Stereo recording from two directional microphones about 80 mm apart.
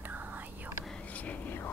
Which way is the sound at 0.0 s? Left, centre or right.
Right.